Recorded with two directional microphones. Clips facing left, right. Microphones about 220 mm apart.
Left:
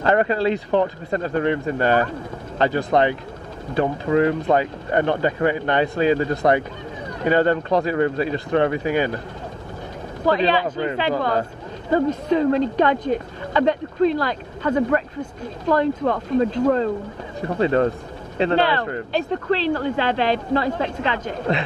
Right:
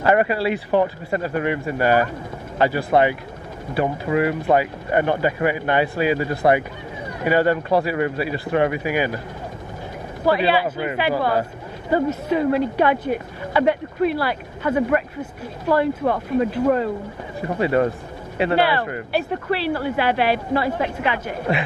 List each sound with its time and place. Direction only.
0.0 s speech: 15° right (ahead or behind)
10.3 s speech: 10° right (ahead or behind)